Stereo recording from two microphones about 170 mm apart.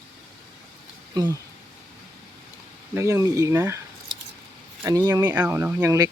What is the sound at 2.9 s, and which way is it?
Speech, 20° right (ahead or behind).